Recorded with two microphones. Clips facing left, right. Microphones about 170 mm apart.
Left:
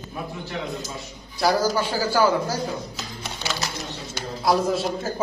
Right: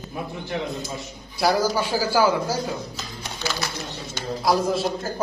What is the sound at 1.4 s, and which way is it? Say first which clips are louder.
Speech: even; 10° right (ahead or behind).